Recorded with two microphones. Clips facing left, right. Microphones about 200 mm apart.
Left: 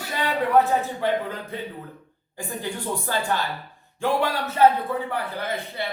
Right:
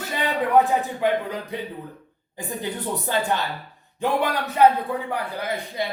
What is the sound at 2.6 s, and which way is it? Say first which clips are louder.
A man's voice: right 1 dB; 20° right (ahead or behind).